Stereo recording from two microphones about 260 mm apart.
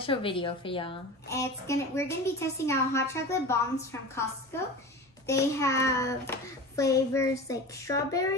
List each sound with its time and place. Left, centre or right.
0.0 s a woman's voice: centre
5.2 s a woman's voice: centre